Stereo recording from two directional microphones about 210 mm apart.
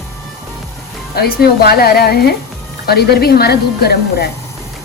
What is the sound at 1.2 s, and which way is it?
Speech, 45° left (ahead or behind).